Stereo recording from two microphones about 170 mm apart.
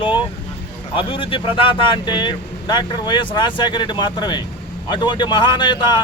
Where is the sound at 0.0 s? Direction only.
30° left (ahead or behind).